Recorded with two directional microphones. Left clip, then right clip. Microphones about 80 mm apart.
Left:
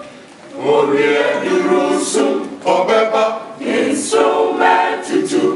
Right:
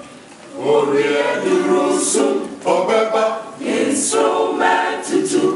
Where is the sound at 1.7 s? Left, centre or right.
Centre.